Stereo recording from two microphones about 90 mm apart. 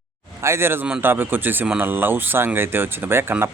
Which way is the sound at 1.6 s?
10° right (ahead or behind).